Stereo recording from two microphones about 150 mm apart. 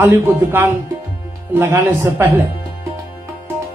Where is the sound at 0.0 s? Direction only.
15° right (ahead or behind).